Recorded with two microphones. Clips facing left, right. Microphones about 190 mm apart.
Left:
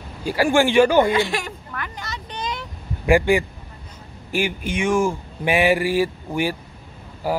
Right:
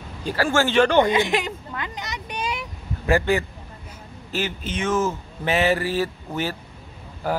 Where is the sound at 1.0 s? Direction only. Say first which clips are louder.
Even; 20° right (ahead or behind).